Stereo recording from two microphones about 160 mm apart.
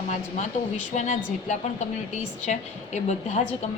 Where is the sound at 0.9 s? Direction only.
45° left (ahead or behind).